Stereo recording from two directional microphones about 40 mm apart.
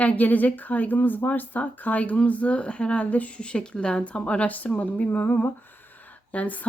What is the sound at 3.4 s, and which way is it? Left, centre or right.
Speech, left.